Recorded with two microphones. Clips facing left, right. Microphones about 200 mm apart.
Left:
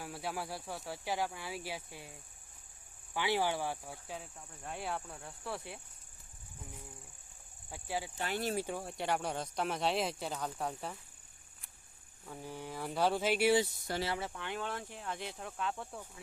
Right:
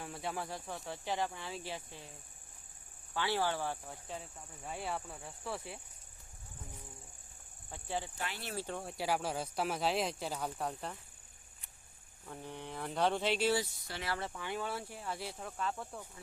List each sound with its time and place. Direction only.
0.0 s speech: 5° left (ahead or behind)
3.2 s speech: 15° left (ahead or behind)
7.7 s speech: 5° left (ahead or behind)
8.2 s speech: 40° left (ahead or behind)
8.5 s speech: 10° left (ahead or behind)
8.8 s speech: centre (ahead or behind)
12.3 s speech: 5° left (ahead or behind)